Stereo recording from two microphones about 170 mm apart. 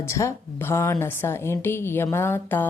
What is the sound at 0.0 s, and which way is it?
A woman's voice, 15° left (ahead or behind).